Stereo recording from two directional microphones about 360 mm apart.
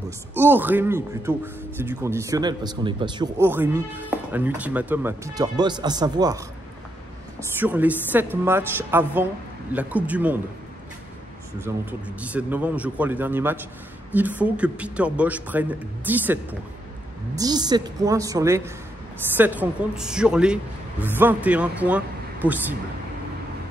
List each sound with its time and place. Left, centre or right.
0.4 s speech: centre
7.6 s a woman's voice: centre
11.6 s a woman's voice: centre
17.4 s a woman's voice: centre